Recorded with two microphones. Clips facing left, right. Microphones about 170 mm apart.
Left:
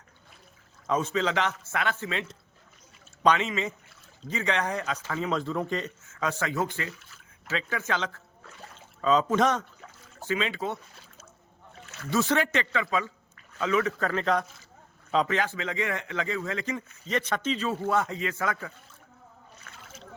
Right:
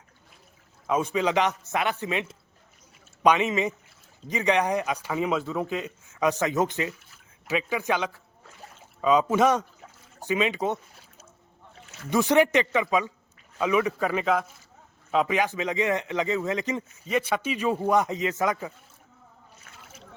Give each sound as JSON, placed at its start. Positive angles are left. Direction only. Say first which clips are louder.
{"t": 0.9, "sound": "a man's voice", "louder": "right 2 dB", "side_deg": -10}
{"t": 12.1, "sound": "a man's voice", "louder": "right 5 dB", "side_deg": -15}
{"t": 17.1, "sound": "a man's voice", "louder": "right 2 dB", "side_deg": -10}